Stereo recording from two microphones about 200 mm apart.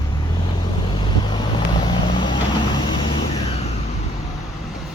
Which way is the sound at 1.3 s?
20° left (ahead or behind).